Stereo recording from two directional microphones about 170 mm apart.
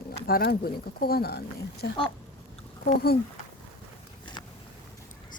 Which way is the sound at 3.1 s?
65° left (ahead or behind).